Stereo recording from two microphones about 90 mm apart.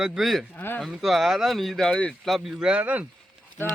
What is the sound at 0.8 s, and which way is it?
Speech, centre (ahead or behind).